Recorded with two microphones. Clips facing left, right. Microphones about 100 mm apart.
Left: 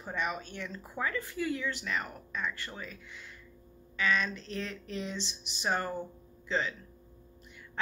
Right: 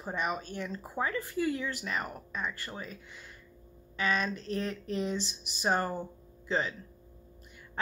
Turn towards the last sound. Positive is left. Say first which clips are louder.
# even
turn(degrees=-45)  # may be behind; listen again after turning